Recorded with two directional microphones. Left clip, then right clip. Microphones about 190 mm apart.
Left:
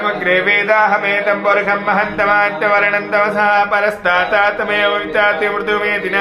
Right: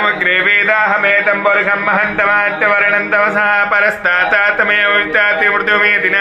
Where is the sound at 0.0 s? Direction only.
10° right (ahead or behind).